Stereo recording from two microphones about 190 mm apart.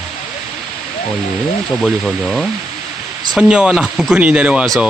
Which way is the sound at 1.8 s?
Centre (ahead or behind).